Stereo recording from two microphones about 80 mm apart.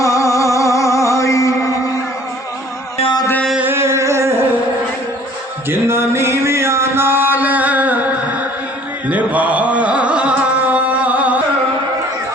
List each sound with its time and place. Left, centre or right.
0.0 s music: left
3.6 s a sound: right
5.6 s music: right